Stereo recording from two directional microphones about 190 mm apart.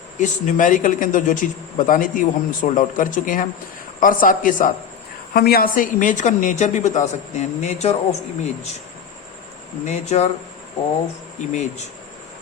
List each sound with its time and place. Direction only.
0.2 s a man's voice: 40° left (ahead or behind)
9.8 s a woman's voice: 35° left (ahead or behind)
11.5 s a woman's voice: 40° left (ahead or behind)